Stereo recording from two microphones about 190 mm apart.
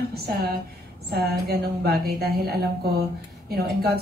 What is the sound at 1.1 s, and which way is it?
A woman's voice, 55° right (ahead or behind).